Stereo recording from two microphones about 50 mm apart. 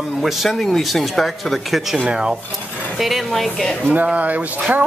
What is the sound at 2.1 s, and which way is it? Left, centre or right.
Speech, centre.